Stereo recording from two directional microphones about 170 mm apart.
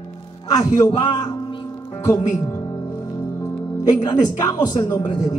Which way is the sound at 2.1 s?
20° left (ahead or behind).